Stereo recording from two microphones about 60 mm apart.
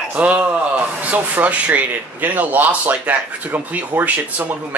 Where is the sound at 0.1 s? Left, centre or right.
Right.